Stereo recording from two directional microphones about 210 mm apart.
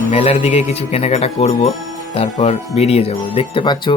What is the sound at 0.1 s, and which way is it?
Speech, 30° left (ahead or behind).